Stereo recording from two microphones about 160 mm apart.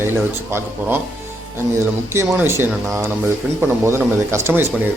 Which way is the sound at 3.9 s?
15° right (ahead or behind).